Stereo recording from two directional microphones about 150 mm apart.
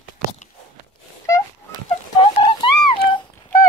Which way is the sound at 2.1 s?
35° left (ahead or behind).